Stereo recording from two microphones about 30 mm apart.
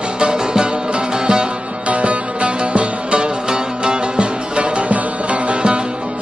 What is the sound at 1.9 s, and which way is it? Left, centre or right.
Music, right.